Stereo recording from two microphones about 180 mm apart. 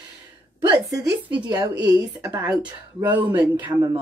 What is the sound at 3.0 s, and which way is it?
Speech, 10° right (ahead or behind).